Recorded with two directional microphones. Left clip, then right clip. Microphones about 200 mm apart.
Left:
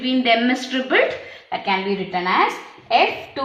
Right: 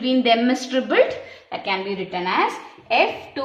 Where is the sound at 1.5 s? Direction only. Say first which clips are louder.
Left 3 dB; 45° right (ahead or behind).